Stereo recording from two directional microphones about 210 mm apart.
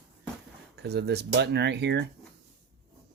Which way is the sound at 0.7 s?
50° right (ahead or behind).